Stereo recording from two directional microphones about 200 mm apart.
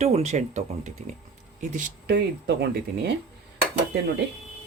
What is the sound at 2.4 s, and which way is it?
Speech, 55° right (ahead or behind).